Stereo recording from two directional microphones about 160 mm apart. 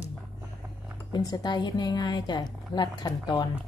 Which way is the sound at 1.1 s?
25° left (ahead or behind).